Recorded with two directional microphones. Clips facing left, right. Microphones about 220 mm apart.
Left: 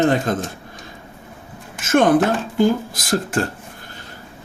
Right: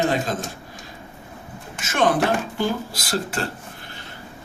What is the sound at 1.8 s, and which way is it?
Speech, 50° left (ahead or behind).